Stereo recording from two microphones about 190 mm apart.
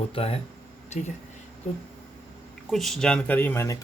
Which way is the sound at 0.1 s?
30° left (ahead or behind).